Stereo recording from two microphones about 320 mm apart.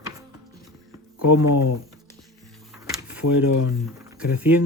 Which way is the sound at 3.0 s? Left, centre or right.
Centre.